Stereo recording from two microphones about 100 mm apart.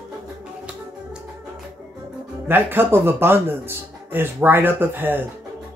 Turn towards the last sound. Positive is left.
turn(degrees=-20)  # may be behind; listen again after turning